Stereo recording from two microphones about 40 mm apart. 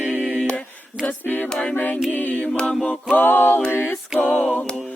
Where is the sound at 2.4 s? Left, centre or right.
Left.